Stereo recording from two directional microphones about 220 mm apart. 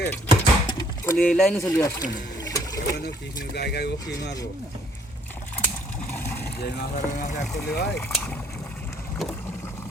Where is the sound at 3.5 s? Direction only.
50° left (ahead or behind).